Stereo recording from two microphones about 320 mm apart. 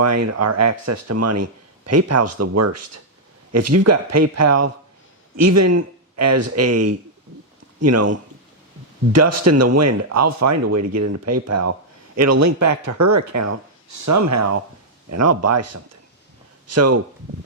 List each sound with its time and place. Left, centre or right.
0.0 s speech: right
9.1 s speech: right